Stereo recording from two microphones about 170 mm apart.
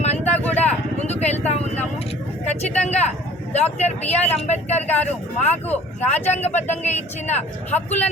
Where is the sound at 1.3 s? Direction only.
40° left (ahead or behind).